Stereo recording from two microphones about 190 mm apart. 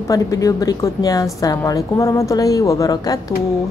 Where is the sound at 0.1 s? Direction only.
15° left (ahead or behind).